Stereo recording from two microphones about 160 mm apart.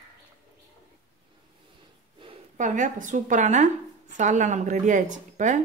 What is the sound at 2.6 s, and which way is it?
A woman's voice, 50° right (ahead or behind).